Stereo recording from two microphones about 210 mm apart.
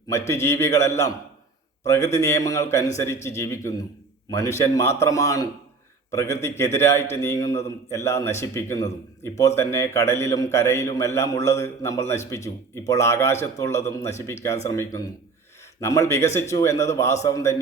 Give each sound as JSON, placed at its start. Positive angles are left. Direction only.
{"t": 0.1, "sound": "a man's voice", "side_deg": 15}